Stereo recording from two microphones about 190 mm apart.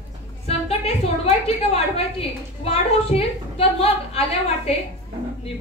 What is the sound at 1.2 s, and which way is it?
A woman's voice, 30° left (ahead or behind).